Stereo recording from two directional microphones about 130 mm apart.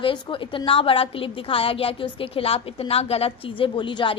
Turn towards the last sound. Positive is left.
turn(degrees=40)  # may be behind; listen again after turning